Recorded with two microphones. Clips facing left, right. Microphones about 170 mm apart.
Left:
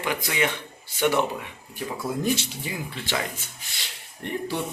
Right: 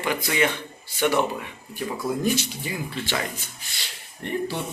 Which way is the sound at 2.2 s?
25° left (ahead or behind).